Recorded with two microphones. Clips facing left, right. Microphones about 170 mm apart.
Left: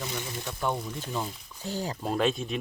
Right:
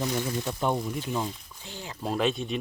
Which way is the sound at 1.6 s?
40° left (ahead or behind).